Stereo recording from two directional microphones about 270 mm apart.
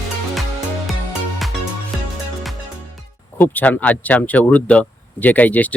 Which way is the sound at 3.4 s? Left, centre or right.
Centre.